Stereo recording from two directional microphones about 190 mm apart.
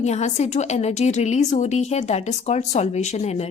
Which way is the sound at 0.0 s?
35° left (ahead or behind).